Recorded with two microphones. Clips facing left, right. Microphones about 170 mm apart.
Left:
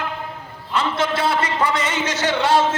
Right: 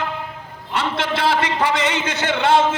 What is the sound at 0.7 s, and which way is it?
A man's voice, 65° right (ahead or behind).